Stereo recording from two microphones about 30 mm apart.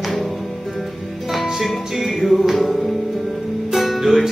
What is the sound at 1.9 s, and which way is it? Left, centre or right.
Music, centre.